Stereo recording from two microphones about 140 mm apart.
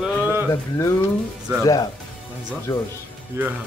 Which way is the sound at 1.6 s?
25° left (ahead or behind).